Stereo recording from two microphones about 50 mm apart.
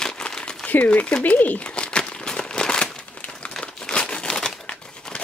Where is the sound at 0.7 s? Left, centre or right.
Left.